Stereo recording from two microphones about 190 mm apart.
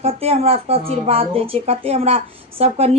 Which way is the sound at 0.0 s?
30° right (ahead or behind).